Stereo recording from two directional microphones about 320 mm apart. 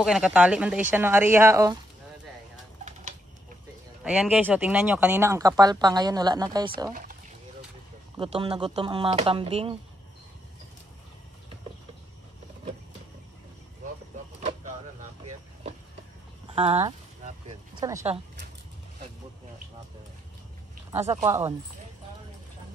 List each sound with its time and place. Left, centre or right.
0.0 s speech: centre
4.0 s speech: centre
6.9 s speech: right
8.2 s speech: centre
14.4 s a sound: right
16.4 s a sound: centre
17.7 s speech: centre
21.0 s speech: centre